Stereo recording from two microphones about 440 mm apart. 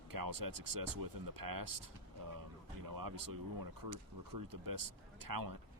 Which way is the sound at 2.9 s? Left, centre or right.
Right.